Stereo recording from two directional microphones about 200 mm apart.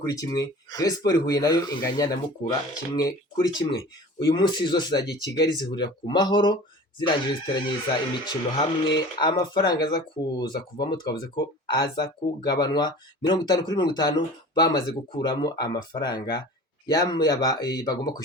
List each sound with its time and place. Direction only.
0.0 s speech: 15° left (ahead or behind)